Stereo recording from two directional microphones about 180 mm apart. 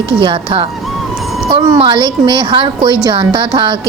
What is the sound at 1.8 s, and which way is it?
Speech, 30° right (ahead or behind).